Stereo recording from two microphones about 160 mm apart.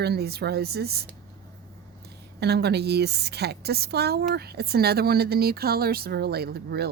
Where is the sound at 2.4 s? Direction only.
90° right.